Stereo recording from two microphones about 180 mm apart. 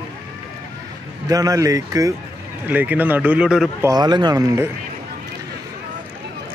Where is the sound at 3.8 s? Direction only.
20° right (ahead or behind).